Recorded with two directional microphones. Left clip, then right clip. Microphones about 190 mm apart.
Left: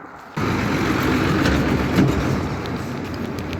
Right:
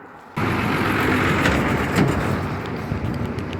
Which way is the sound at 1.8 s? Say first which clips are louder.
Left 1 dB; 45° left (ahead or behind).